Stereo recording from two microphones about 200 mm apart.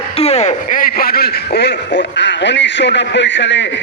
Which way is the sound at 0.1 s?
30° left (ahead or behind).